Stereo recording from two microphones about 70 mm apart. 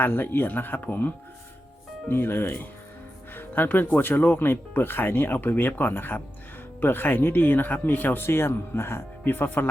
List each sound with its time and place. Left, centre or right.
0.0 s speech: left